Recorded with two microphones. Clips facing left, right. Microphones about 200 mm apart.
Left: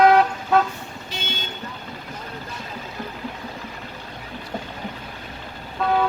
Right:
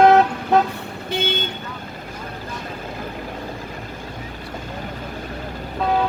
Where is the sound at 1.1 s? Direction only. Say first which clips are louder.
Right 11 dB; 55° right (ahead or behind).